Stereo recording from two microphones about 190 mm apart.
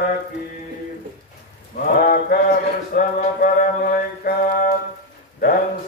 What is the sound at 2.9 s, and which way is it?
Mantra, 50° left (ahead or behind).